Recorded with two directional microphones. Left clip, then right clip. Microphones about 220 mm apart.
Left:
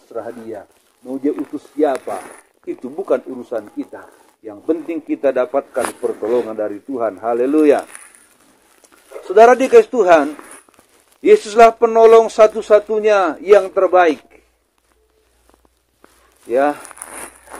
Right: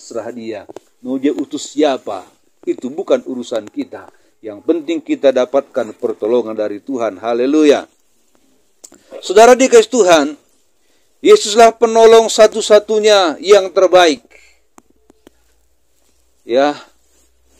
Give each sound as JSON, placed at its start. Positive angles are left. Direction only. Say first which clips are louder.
{"t": 0.1, "sound": "speech", "louder": "right 3 dB", "side_deg": -45}
{"t": 6.0, "sound": "speech", "louder": "right 4 dB", "side_deg": -50}
{"t": 16.4, "sound": "speech", "louder": "right 2 dB", "side_deg": -45}